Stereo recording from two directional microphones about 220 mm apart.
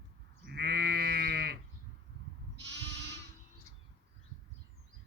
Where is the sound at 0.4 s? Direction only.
50° right (ahead or behind).